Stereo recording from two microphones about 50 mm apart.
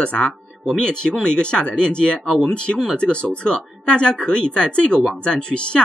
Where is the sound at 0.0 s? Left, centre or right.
Left.